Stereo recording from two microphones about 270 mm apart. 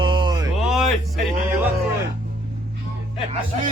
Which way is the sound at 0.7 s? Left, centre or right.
Centre.